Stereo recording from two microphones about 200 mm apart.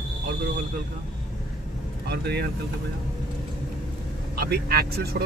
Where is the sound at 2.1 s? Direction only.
55° right (ahead or behind).